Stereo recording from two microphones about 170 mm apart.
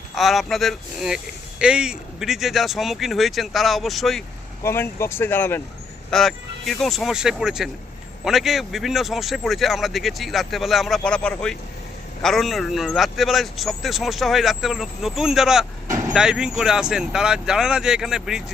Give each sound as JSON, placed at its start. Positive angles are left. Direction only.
{"t": 0.2, "sound": "speech", "side_deg": 0}
{"t": 4.6, "sound": "speech", "side_deg": 15}
{"t": 6.1, "sound": "speech", "side_deg": 0}